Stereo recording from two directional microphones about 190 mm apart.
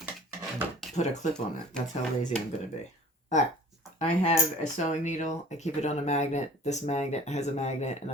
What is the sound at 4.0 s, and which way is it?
Speech, 35° left (ahead or behind).